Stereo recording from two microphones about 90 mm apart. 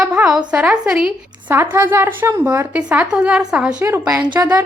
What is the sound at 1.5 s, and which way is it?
A woman's voice, 25° right (ahead or behind).